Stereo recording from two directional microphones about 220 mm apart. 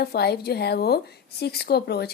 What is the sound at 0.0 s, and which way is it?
A woman's voice, 45° left (ahead or behind).